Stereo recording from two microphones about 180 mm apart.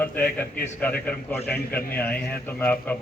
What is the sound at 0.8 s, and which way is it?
Speech, 10° left (ahead or behind).